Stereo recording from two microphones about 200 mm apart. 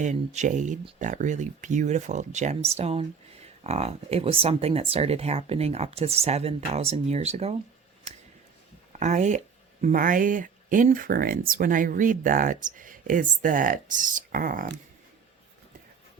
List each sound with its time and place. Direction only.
0.0 s speech: 35° right (ahead or behind)
8.9 s speech: 35° right (ahead or behind)